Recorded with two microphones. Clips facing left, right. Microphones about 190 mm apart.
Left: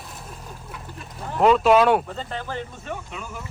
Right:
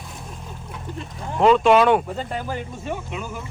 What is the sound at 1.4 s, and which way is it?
Speech, 5° left (ahead or behind).